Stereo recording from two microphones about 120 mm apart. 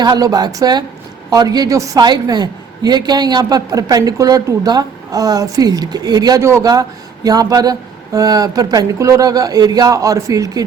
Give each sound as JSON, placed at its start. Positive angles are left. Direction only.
{"t": 0.0, "sound": "a woman's voice", "side_deg": -35}